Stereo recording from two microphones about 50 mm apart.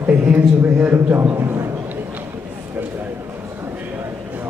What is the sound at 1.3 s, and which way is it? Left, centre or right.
Speech, right.